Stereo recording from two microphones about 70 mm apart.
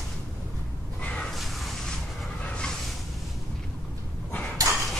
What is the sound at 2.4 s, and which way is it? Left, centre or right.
Vehicle, centre.